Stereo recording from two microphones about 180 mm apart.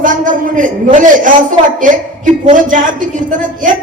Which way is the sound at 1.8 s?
45° right (ahead or behind).